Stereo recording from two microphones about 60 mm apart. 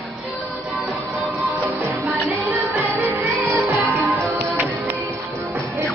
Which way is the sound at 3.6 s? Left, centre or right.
Right.